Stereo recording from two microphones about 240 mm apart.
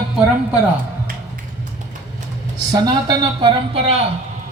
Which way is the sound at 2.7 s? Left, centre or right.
Centre.